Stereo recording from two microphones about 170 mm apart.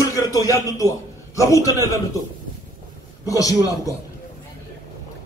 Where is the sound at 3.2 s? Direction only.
20° left (ahead or behind).